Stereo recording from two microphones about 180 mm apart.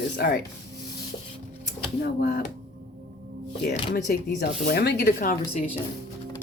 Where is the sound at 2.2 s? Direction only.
55° left (ahead or behind).